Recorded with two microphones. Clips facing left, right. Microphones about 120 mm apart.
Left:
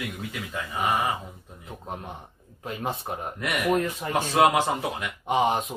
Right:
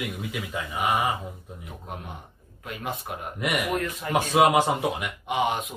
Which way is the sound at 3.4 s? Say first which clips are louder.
Left 2 dB; 10° right (ahead or behind).